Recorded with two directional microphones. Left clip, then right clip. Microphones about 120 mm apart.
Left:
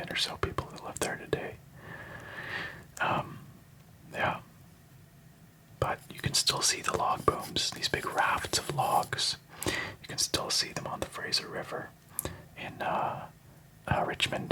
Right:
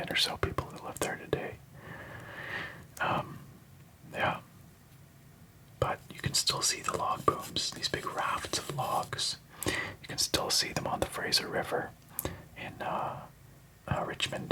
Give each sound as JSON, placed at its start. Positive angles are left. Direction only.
{"t": 0.0, "sound": "whispering", "side_deg": -15}
{"t": 4.1, "sound": "a sound", "side_deg": 0}
{"t": 5.8, "sound": "speech", "side_deg": 0}
{"t": 12.1, "sound": "whispering", "side_deg": -10}
{"t": 12.5, "sound": "speech", "side_deg": 0}